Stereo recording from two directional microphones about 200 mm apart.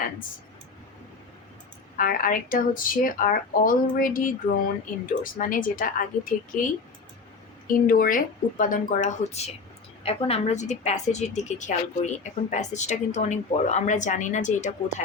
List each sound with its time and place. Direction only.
2.0 s speech: 45° left (ahead or behind)
7.7 s a woman's voice: 45° left (ahead or behind)